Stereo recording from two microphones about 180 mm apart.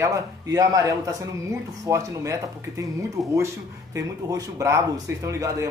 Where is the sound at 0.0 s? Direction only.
20° right (ahead or behind).